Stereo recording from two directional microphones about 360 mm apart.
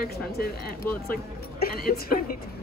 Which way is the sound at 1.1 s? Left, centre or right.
Left.